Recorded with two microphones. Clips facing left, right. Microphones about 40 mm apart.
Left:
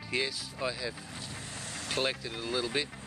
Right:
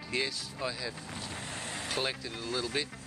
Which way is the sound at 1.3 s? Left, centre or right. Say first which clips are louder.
Right 4 dB; right.